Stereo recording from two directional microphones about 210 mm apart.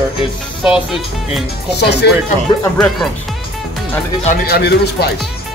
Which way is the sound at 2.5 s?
20° left (ahead or behind).